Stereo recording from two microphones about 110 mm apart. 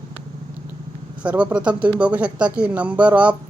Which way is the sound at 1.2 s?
10° right (ahead or behind).